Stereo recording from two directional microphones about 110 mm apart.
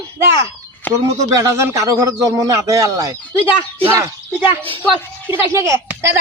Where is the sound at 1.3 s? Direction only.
25° right (ahead or behind).